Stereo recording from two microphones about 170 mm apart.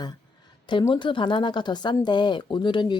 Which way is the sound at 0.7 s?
30° left (ahead or behind).